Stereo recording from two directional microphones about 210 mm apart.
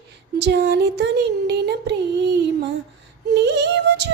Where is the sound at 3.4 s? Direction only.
55° right (ahead or behind).